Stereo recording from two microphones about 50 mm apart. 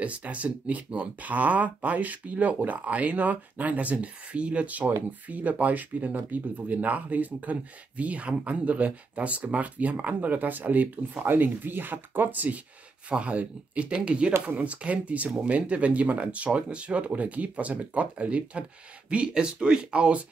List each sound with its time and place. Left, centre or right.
0.0 s speech: right